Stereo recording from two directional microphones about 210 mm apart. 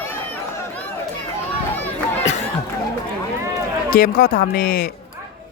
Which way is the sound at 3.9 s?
45° left (ahead or behind).